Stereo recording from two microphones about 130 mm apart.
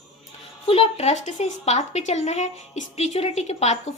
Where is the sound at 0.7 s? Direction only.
50° left (ahead or behind).